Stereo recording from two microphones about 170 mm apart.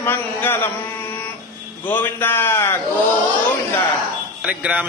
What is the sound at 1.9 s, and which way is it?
Mantra, 10° left (ahead or behind).